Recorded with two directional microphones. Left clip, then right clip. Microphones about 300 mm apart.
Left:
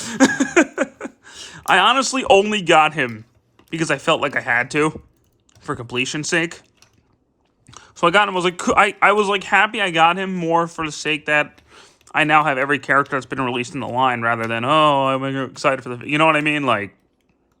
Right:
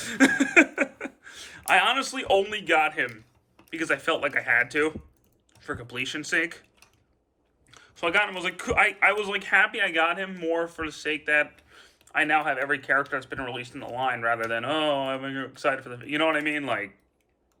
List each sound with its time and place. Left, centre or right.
0.0 s a sound: centre
3.7 s speech: centre
7.7 s speech: centre